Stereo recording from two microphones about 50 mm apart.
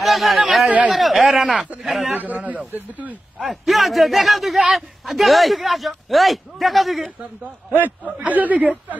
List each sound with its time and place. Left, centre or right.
0.0 s a man's voice: centre
0.7 s a man's voice: right
0.9 s a man's voice: centre
2.1 s speech: right
3.4 s a man's voice: centre
8.3 s speech: right